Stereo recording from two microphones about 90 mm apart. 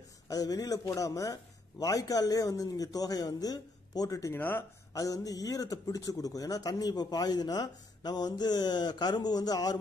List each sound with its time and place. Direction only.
0.3 s speech: 40° left (ahead or behind)
4.3 s speech: 25° left (ahead or behind)
4.9 s speech: 40° left (ahead or behind)